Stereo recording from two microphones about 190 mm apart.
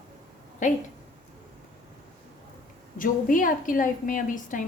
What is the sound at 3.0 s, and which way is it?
A woman's voice, 45° left (ahead or behind).